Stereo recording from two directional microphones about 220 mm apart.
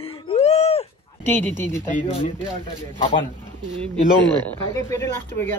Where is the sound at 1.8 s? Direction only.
35° left (ahead or behind).